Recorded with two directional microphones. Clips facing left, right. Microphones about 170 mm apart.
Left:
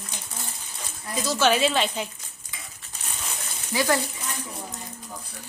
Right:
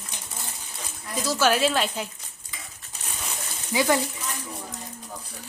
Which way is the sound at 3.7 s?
15° right (ahead or behind).